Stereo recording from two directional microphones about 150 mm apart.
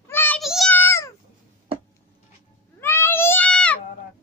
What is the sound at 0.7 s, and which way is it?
Cat, 15° left (ahead or behind).